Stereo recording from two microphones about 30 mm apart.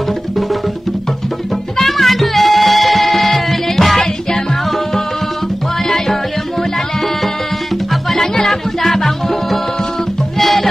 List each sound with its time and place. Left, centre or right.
1.9 s music: centre
5.9 s music: centre
7.9 s music: centre